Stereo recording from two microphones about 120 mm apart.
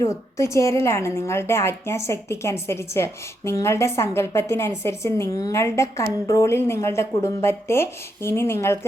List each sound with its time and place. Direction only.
0.0 s a woman's voice: 25° left (ahead or behind)